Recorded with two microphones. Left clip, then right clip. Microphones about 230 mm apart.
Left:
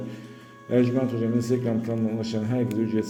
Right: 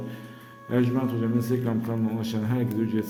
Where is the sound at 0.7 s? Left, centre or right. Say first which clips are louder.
Left 3 dB; centre.